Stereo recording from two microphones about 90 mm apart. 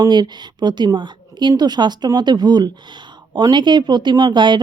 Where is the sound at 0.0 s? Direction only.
55° right (ahead or behind).